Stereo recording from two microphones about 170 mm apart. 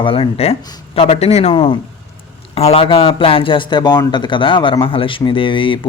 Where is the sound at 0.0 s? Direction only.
30° left (ahead or behind).